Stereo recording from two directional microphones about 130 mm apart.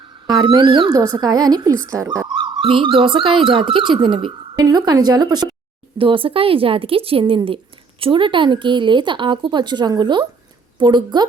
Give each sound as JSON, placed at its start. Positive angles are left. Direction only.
{"t": 0.3, "sound": "speech", "side_deg": -35}